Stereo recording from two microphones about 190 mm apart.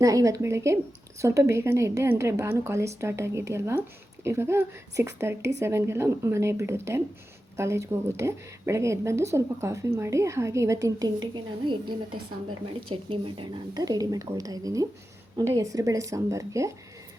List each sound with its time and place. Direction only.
0.0 s a woman's voice: 15° right (ahead or behind)